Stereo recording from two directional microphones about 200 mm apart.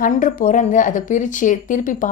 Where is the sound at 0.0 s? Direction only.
45° left (ahead or behind).